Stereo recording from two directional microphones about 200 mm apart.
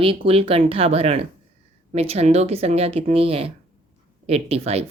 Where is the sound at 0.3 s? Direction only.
30° right (ahead or behind).